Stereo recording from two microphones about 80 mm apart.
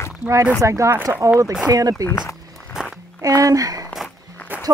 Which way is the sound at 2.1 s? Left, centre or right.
Left.